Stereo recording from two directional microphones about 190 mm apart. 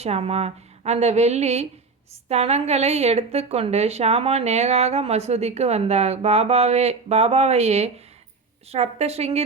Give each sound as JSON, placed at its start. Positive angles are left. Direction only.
{"t": 0.0, "sound": "a woman's voice", "side_deg": -35}